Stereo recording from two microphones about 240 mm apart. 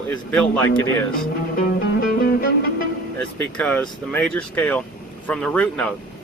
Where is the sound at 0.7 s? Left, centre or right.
Left.